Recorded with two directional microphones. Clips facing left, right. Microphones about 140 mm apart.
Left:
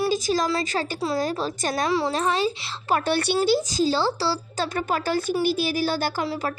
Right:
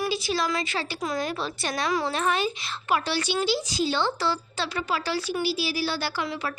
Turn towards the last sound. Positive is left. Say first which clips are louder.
# left 4 dB
turn(degrees=40)  # may be behind; listen again after turning